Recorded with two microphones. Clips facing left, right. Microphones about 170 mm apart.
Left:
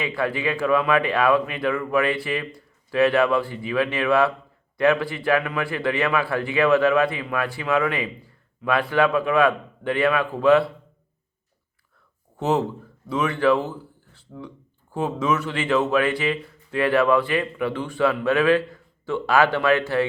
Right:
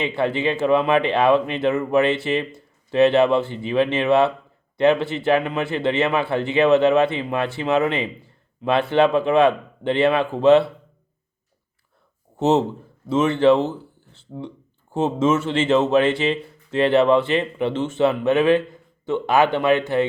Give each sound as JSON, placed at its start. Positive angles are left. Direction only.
{"t": 0.0, "sound": "a man's voice", "side_deg": -25}
{"t": 12.4, "sound": "a man's voice", "side_deg": -25}